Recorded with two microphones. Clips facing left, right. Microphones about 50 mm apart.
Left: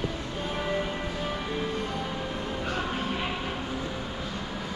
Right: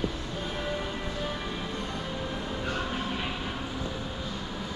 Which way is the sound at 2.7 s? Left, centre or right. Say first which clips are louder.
Left 2 dB; centre.